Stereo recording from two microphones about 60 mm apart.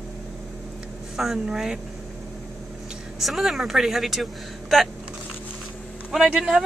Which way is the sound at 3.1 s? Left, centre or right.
Centre.